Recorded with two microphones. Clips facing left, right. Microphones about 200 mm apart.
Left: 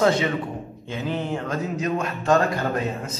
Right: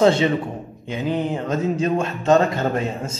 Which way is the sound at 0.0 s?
25° right (ahead or behind).